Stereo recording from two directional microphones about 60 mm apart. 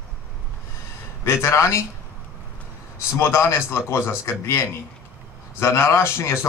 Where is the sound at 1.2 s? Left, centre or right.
Left.